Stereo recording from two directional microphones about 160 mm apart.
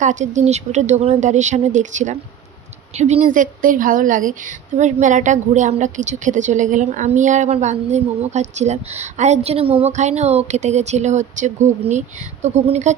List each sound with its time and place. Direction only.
0.0 s a woman's voice: 50° right (ahead or behind)
3.3 s a woman's voice: 55° right (ahead or behind)